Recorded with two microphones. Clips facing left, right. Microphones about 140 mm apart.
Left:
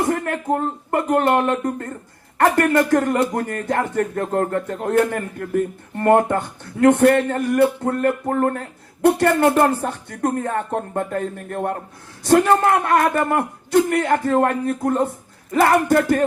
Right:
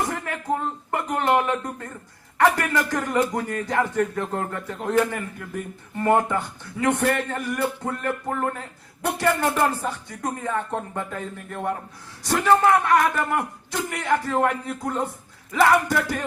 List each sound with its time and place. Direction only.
0.1 s a man's voice: 50° left (ahead or behind)